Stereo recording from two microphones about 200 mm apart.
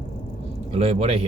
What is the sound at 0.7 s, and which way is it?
Speech, 30° right (ahead or behind).